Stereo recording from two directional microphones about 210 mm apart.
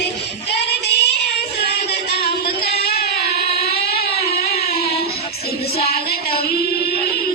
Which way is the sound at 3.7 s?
50° left (ahead or behind).